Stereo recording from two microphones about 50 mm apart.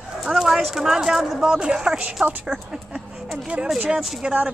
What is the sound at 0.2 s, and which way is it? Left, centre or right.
Speech, centre.